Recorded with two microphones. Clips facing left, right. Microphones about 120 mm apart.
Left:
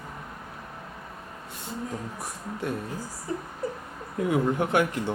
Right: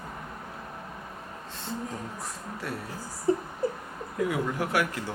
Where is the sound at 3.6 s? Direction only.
30° right (ahead or behind).